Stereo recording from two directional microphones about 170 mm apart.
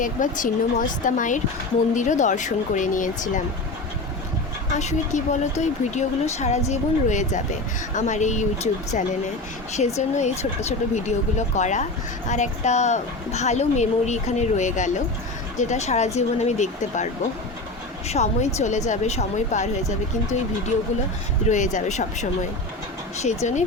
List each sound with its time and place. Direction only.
0.0 s speech: 50° left (ahead or behind)
4.8 s speech: 45° left (ahead or behind)
18.1 s speech: 40° left (ahead or behind)
21.5 s speech: 45° left (ahead or behind)